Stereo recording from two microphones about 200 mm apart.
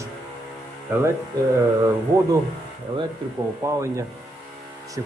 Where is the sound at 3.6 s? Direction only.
15° right (ahead or behind).